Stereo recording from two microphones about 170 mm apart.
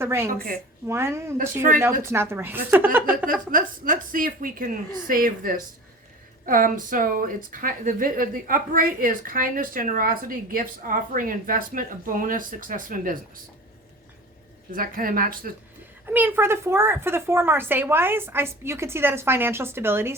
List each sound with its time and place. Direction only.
0.0 s a woman's voice: 15° right (ahead or behind)
3.5 s a woman's voice: 55° right (ahead or behind)
14.7 s a woman's voice: 55° right (ahead or behind)
16.0 s a woman's voice: 10° right (ahead or behind)